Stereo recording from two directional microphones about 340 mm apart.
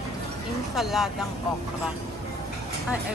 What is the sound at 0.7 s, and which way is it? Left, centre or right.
Speech, centre.